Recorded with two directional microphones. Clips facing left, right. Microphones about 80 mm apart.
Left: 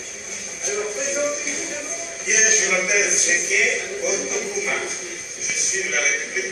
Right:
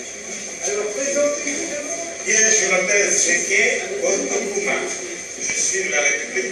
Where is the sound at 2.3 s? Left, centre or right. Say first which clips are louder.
Right 2 dB; left.